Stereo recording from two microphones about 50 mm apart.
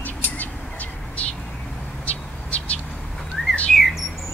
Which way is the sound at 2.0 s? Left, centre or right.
Left.